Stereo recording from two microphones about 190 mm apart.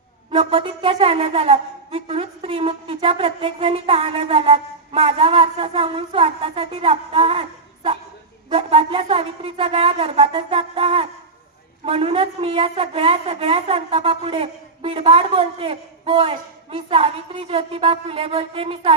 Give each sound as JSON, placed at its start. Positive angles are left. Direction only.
{"t": 0.3, "sound": "wind instrument", "side_deg": -30}
{"t": 8.4, "sound": "wind instrument", "side_deg": -30}